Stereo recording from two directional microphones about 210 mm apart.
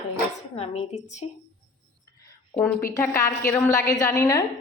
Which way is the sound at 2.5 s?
5° left (ahead or behind).